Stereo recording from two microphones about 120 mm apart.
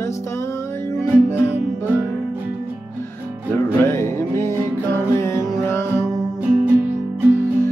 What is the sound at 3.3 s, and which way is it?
Music, 15° right (ahead or behind).